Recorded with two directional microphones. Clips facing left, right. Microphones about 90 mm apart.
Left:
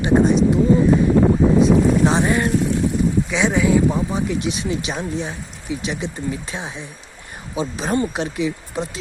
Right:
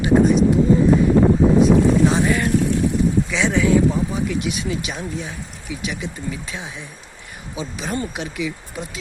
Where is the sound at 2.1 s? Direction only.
30° left (ahead or behind).